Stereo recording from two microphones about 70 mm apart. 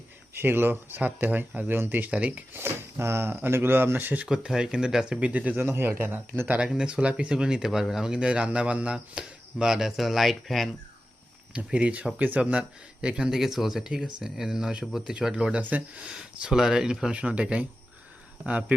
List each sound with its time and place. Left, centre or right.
0.3 s speech: right
2.5 s speech: right
4.3 s speech: centre
5.2 s speech: centre
5.6 s speech: right
6.5 s speech: centre
11.5 s speech: centre